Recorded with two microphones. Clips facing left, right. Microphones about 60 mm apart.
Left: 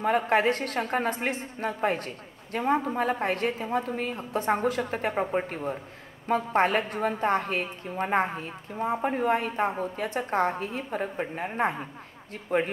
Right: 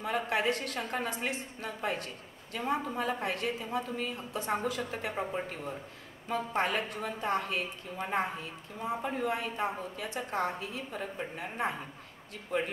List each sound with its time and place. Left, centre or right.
0.0 s a man's voice: left